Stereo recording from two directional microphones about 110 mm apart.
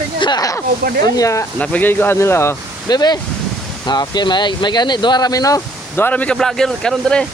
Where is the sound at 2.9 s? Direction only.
40° left (ahead or behind).